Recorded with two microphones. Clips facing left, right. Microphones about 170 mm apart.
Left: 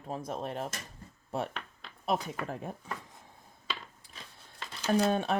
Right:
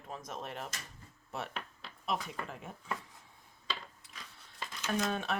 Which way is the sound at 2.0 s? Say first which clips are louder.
Left 5 dB; 40° left (ahead or behind).